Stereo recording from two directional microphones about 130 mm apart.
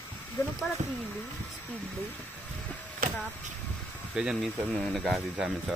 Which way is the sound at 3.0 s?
90° right.